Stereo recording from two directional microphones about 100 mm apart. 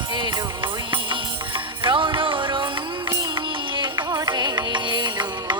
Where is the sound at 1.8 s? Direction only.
55° right (ahead or behind).